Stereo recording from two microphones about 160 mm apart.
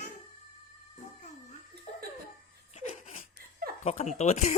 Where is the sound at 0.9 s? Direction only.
45° left (ahead or behind).